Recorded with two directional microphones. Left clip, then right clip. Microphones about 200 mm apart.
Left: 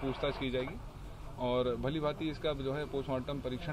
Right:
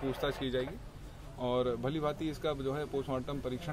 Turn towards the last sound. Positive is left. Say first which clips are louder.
# even
turn(degrees=-20)  # may be behind; listen again after turning